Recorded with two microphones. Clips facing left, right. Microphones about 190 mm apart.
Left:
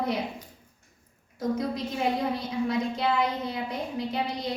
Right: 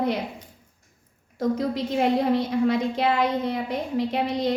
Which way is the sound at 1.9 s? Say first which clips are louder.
Right 8 dB; 70° right (ahead or behind).